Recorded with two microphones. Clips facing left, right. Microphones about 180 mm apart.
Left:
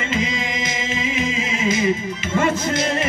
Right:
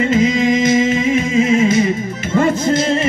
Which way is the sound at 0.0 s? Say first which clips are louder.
Right 10 dB; 40° right (ahead or behind).